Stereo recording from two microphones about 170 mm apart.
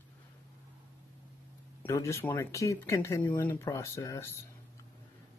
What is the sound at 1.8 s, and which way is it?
Speech, 15° left (ahead or behind).